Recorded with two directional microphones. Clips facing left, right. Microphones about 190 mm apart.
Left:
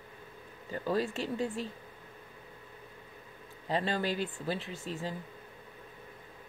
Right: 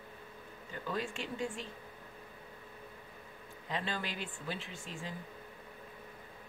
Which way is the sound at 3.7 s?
35° left (ahead or behind).